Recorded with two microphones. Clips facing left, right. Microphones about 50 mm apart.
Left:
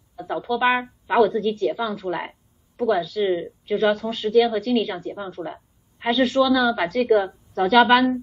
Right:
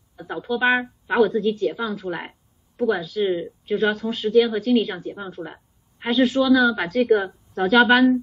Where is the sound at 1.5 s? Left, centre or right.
Centre.